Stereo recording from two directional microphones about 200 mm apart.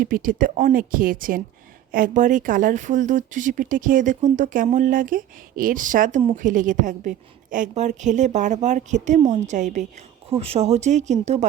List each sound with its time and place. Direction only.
0.0 s speech: 45° right (ahead or behind)